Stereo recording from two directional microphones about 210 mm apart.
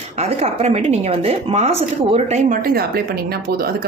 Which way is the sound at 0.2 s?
30° right (ahead or behind).